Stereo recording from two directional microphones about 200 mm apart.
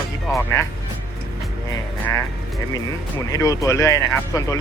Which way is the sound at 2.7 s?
15° left (ahead or behind).